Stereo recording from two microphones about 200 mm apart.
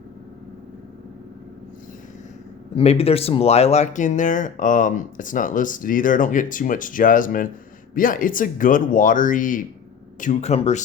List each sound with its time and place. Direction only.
2.7 s speech: 30° left (ahead or behind)